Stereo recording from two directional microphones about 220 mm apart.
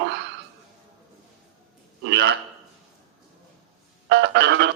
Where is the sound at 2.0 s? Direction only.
50° right (ahead or behind).